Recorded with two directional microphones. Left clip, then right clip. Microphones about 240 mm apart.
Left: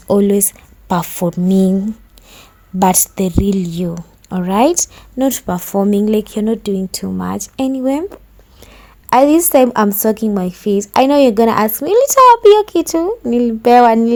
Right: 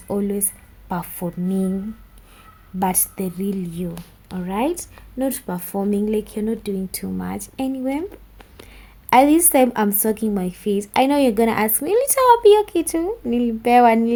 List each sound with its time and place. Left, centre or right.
0.1 s a woman's voice: left